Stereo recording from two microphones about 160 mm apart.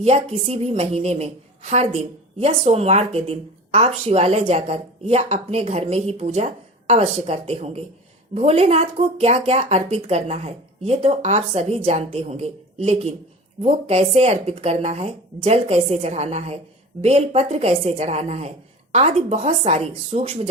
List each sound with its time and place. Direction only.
0.0 s speech: 40° right (ahead or behind)